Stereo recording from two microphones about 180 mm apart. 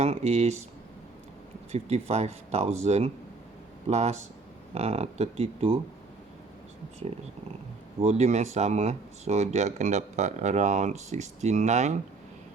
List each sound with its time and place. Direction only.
0.0 s speech: 35° right (ahead or behind)
1.7 s speech: 35° right (ahead or behind)
7.9 s speech: 40° right (ahead or behind)